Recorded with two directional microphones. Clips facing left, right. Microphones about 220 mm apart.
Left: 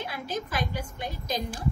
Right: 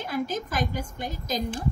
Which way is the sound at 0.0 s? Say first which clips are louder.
Right 4 dB; 45° right (ahead or behind).